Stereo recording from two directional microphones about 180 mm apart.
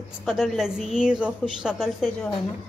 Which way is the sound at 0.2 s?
Centre (ahead or behind).